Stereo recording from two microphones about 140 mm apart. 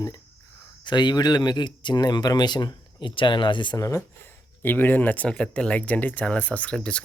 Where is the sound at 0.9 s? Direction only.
30° left (ahead or behind).